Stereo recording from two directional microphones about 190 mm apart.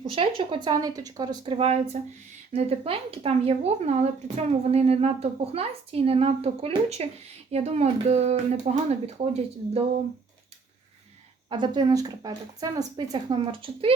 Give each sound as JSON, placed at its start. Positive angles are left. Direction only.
{"t": 0.0, "sound": "speech", "side_deg": -30}
{"t": 11.4, "sound": "speech", "side_deg": -25}